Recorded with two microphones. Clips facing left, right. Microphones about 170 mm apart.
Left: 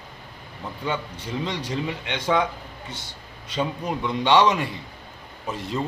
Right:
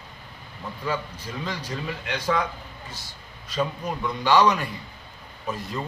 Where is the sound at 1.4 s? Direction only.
25° left (ahead or behind).